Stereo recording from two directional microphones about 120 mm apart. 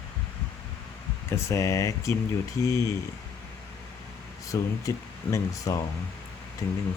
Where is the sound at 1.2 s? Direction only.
25° left (ahead or behind).